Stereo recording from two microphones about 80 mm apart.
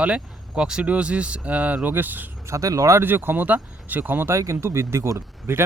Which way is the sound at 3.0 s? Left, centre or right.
Right.